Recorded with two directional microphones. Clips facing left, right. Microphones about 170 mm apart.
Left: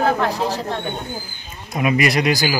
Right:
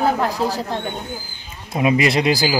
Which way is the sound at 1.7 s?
25° right (ahead or behind).